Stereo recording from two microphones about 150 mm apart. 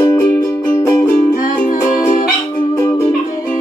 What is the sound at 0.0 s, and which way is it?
Music, 20° left (ahead or behind).